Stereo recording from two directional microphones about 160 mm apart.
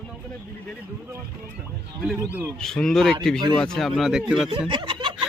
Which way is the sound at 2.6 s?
5° left (ahead or behind).